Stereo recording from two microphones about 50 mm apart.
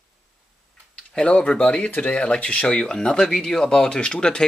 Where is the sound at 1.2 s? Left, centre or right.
Left.